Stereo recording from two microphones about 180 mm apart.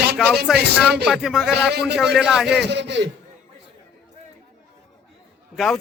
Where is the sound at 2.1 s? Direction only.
Centre (ahead or behind).